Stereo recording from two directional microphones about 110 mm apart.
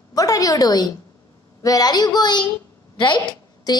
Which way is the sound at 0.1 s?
30° left (ahead or behind).